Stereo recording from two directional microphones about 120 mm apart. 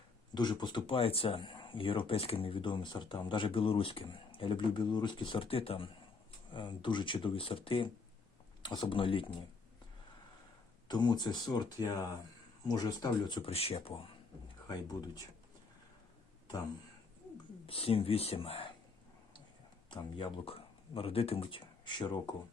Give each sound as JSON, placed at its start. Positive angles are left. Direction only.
{"t": 0.3, "sound": "speech", "side_deg": 40}
{"t": 10.8, "sound": "speech", "side_deg": 35}
{"t": 13.5, "sound": "speech", "side_deg": 55}
{"t": 17.7, "sound": "speech", "side_deg": 50}
{"t": 19.9, "sound": "speech", "side_deg": 45}